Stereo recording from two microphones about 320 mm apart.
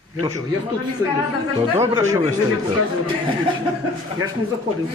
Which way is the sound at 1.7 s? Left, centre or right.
Centre.